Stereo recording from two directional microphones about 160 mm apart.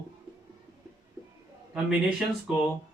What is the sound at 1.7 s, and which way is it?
Speech, 5° right (ahead or behind).